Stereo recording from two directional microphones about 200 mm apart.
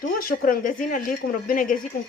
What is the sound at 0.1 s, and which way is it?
Speech, 45° left (ahead or behind).